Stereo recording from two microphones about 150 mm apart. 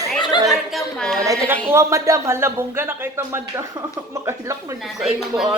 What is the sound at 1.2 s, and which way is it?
A man's voice, 15° right (ahead or behind).